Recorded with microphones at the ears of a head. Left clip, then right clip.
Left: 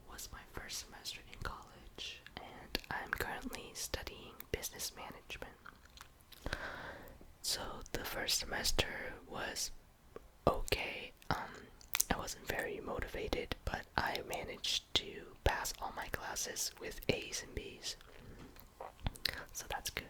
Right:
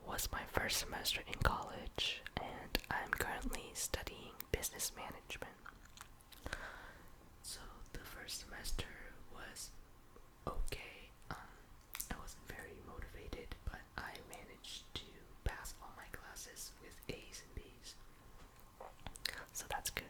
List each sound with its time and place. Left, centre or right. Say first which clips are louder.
0.0 s whispering: right 8 dB; right
2.7 s whispering: even; centre
6.6 s whispering: left 6 dB; left